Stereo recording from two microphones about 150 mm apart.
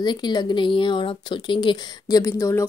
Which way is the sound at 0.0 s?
30° left (ahead or behind).